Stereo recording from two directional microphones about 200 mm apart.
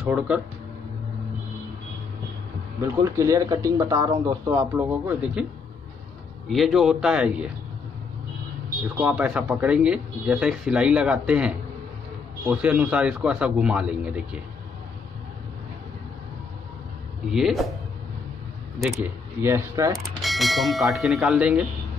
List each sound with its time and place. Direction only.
0.0 s speech: 5° right (ahead or behind)
2.8 s speech: 15° right (ahead or behind)
6.5 s speech: centre (ahead or behind)
8.9 s speech: 10° right (ahead or behind)
17.3 s speech: centre (ahead or behind)
18.8 s speech: 10° right (ahead or behind)
20.2 s speech: centre (ahead or behind)